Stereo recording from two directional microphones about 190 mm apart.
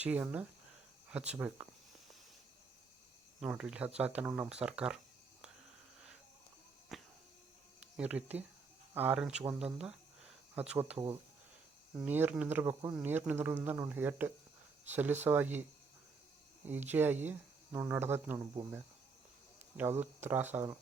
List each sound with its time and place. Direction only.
0.0 s speech: 10° right (ahead or behind)
3.4 s speech: 5° right (ahead or behind)
6.9 s a sound: centre (ahead or behind)
7.8 s speech: 5° right (ahead or behind)
9.4 s cricket: 5° right (ahead or behind)
10.7 s speech: 5° right (ahead or behind)
10.9 s speech: 25° right (ahead or behind)
11.9 s speech: 10° right (ahead or behind)
16.9 s speech: 10° right (ahead or behind)
19.7 s speech: 10° right (ahead or behind)